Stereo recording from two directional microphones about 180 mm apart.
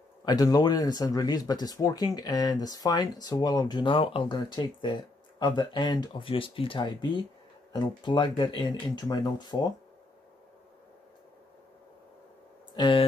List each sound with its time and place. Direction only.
0.2 s speech: 20° left (ahead or behind)
12.7 s speech: 25° left (ahead or behind)